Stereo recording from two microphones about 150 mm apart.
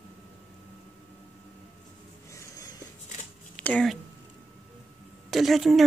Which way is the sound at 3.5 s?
10° left (ahead or behind).